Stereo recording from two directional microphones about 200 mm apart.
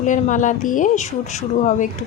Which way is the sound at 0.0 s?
40° left (ahead or behind).